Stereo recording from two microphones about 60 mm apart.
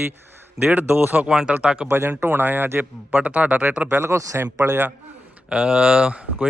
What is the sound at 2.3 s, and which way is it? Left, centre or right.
Speech, right.